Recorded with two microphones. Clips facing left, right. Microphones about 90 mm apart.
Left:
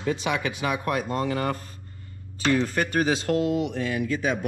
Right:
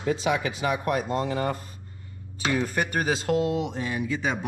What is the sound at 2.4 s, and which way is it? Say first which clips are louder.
Speech: left 3 dB; 10° right (ahead or behind).